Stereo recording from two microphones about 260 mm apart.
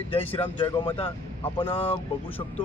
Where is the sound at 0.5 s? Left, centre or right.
Centre.